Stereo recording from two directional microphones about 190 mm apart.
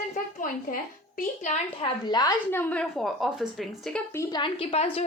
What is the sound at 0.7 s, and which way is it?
Speech, 45° left (ahead or behind).